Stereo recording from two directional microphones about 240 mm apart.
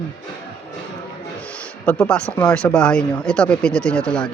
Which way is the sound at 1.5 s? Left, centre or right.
Centre.